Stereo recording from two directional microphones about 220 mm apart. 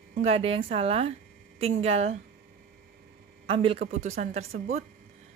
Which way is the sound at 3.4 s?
25° right (ahead or behind).